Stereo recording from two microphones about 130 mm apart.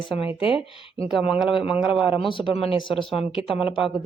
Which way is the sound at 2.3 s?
40° left (ahead or behind).